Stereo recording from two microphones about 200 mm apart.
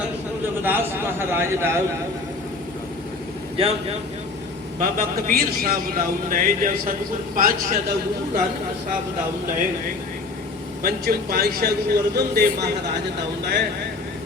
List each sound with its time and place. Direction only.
0.6 s a man's voice: 10° right (ahead or behind)
3.6 s a man's voice: 30° right (ahead or behind)
4.8 s a man's voice: 45° right (ahead or behind)
10.8 s a man's voice: 50° right (ahead or behind)